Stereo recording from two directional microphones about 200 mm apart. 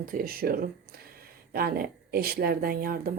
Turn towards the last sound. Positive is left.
turn(degrees=-45)  # may be behind; listen again after turning